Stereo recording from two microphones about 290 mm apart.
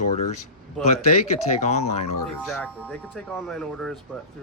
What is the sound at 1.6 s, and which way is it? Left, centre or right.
Speech, left.